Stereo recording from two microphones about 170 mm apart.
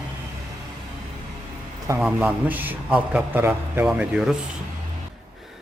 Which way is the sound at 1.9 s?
5° right (ahead or behind).